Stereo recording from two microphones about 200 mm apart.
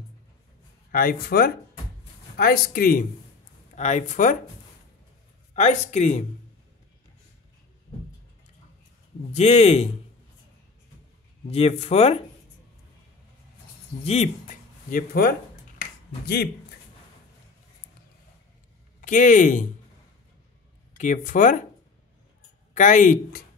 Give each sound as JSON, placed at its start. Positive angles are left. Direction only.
{"t": 0.9, "sound": "speech", "side_deg": 50}
{"t": 5.5, "sound": "speech", "side_deg": 35}
{"t": 9.3, "sound": "speech", "side_deg": 30}
{"t": 11.4, "sound": "speech", "side_deg": 30}
{"t": 14.0, "sound": "speech", "side_deg": 30}
{"t": 14.9, "sound": "speech", "side_deg": 45}
{"t": 18.9, "sound": "speech", "side_deg": 40}
{"t": 21.0, "sound": "speech", "side_deg": 40}
{"t": 22.8, "sound": "speech", "side_deg": 40}